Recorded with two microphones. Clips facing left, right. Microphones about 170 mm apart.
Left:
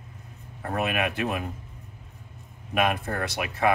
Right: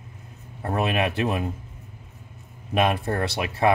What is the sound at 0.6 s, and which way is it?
Speech, 30° right (ahead or behind).